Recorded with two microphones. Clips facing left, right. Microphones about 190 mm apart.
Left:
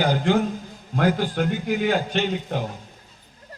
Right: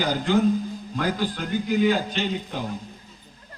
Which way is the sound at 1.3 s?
60° left (ahead or behind).